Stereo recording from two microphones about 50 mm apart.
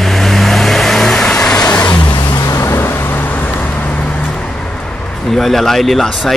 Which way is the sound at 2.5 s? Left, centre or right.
Left.